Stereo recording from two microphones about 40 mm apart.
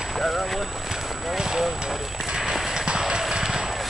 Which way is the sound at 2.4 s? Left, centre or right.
Centre.